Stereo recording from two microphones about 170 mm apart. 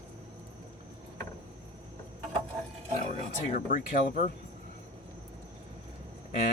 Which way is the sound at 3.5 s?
50° left (ahead or behind).